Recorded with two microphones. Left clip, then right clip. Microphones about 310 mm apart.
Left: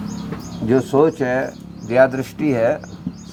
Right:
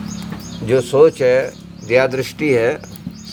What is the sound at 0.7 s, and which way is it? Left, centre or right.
Speech, right.